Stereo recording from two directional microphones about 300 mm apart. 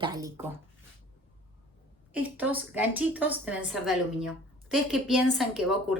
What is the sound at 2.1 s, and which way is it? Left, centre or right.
A woman's voice, centre.